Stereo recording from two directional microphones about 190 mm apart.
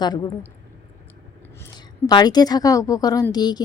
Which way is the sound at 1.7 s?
20° left (ahead or behind).